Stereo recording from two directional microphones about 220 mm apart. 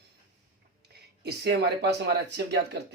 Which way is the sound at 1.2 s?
50° right (ahead or behind).